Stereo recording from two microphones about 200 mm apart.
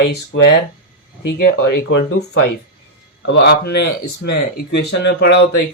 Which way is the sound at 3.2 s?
60° left (ahead or behind).